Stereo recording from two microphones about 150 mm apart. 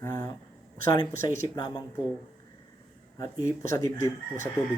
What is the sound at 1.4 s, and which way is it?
Speech, 25° left (ahead or behind).